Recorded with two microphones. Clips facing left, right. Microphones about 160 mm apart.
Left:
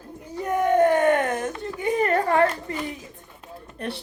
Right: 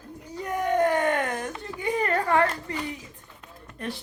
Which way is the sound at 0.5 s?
45° left (ahead or behind).